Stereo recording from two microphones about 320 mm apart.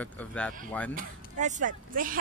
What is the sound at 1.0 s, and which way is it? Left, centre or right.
Speech, right.